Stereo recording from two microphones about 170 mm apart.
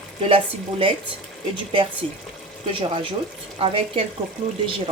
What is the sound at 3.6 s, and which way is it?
Speech, 35° right (ahead or behind).